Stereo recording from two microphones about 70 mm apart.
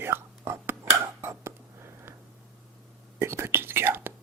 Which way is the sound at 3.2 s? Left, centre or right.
Right.